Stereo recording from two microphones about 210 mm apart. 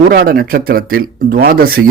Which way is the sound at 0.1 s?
45° right (ahead or behind).